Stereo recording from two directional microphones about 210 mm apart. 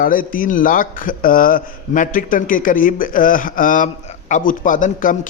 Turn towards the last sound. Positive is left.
turn(degrees=40)  # may be behind; listen again after turning